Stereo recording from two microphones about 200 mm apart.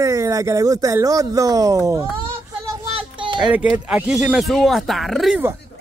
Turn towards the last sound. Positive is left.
turn(degrees=-5)  # may be behind; listen again after turning